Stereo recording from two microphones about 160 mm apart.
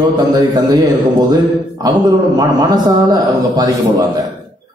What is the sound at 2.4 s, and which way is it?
A man's voice, 25° right (ahead or behind).